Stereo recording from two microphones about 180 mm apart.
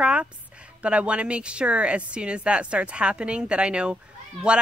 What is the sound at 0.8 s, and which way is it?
A woman's voice, 5° right (ahead or behind).